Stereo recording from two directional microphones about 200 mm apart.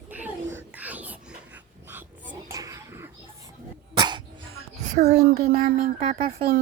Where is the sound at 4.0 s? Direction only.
20° right (ahead or behind).